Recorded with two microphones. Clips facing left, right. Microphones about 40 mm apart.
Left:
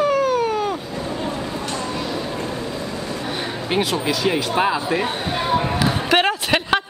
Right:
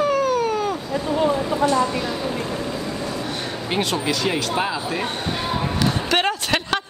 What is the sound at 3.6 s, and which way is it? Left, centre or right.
Speech, centre.